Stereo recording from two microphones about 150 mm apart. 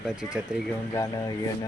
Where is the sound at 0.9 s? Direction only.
20° left (ahead or behind).